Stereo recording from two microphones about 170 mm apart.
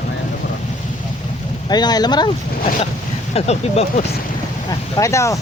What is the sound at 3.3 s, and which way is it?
Speech, 40° left (ahead or behind).